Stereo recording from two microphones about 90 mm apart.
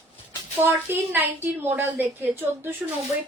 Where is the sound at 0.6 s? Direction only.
25° right (ahead or behind).